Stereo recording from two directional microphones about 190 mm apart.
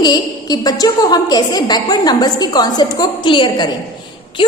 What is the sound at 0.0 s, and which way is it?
A woman's voice, 20° left (ahead or behind).